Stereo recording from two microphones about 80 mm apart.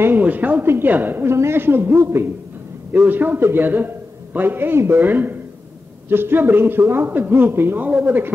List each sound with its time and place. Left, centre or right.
0.0 s a man's voice: right